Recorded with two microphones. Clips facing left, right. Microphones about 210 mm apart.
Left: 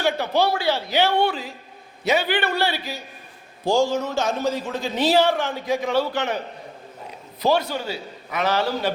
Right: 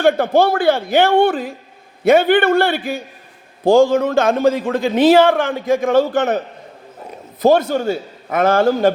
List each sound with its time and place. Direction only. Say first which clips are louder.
0.0 s a man's voice: right 8 dB; 50° right (ahead or behind)
7.4 s a man's voice: right 8 dB; 50° right (ahead or behind)